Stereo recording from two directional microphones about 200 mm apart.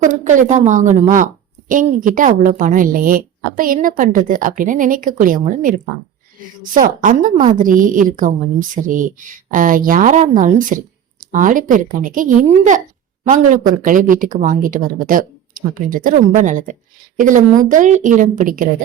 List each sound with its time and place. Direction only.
0.0 s a woman's voice: 40° right (ahead or behind)
6.7 s a woman's voice: 40° right (ahead or behind)